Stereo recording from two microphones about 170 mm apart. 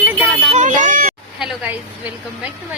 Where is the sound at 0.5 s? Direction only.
50° right (ahead or behind).